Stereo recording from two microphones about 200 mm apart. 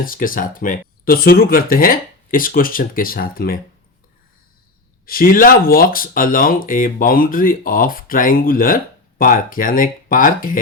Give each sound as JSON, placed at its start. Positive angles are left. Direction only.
{"t": 0.0, "sound": "speech", "side_deg": 45}
{"t": 5.0, "sound": "speech", "side_deg": 45}